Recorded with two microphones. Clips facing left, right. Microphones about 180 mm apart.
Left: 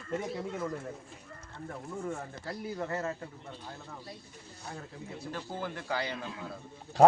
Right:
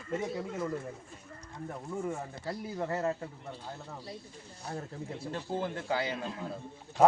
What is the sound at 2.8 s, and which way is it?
Speech, 20° right (ahead or behind).